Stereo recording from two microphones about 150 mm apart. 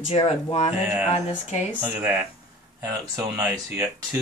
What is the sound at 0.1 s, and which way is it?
Speech, 40° left (ahead or behind).